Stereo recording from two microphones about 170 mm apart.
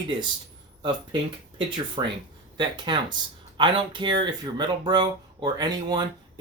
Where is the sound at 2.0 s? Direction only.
25° right (ahead or behind).